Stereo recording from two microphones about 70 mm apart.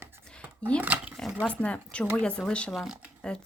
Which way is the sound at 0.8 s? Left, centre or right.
Right.